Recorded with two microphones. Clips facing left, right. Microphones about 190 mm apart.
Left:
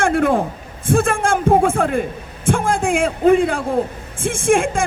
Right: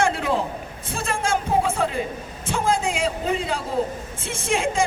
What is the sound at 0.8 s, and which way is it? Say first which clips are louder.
Music: left 9 dB; 55° left (ahead or behind).